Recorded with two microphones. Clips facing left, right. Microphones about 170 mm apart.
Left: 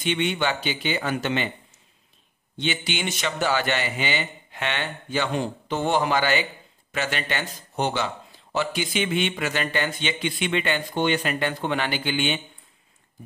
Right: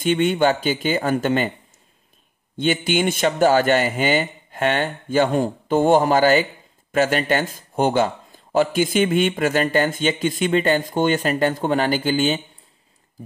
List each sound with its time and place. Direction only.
0.0 s speech: 45° right (ahead or behind)
2.5 s speech: 50° right (ahead or behind)